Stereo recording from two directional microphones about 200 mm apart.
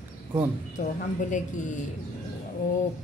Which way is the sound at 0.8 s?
40° left (ahead or behind).